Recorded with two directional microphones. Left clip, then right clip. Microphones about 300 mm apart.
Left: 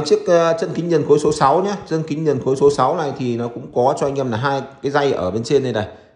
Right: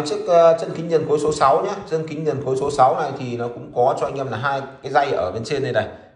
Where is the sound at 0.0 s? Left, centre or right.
Left.